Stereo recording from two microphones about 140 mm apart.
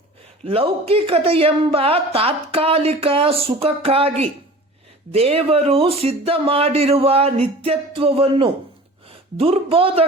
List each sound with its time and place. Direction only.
0.4 s a woman's voice: 40° right (ahead or behind)